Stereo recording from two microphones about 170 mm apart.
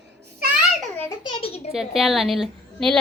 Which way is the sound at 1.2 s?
35° left (ahead or behind).